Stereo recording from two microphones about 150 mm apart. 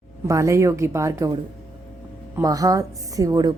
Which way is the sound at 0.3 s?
20° right (ahead or behind).